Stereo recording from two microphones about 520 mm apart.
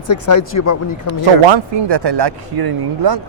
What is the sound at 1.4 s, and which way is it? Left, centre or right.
Speech, right.